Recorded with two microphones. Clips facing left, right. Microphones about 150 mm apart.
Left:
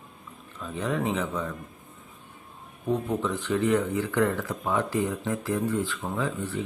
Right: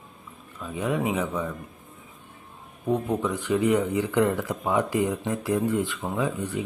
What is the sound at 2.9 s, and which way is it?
Speech, 10° right (ahead or behind).